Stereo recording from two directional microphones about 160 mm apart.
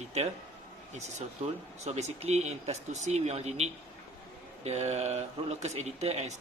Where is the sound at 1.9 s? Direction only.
45° right (ahead or behind).